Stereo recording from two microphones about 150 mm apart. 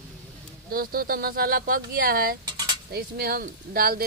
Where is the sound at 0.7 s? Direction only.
80° right.